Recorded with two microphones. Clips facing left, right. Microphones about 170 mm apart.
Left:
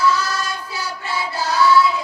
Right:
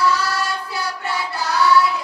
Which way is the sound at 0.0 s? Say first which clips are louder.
Even; 65° right (ahead or behind).